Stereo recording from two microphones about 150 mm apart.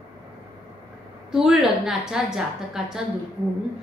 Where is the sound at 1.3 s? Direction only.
5° right (ahead or behind).